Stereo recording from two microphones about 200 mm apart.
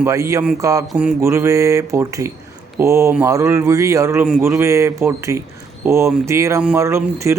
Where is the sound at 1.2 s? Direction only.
15° right (ahead or behind).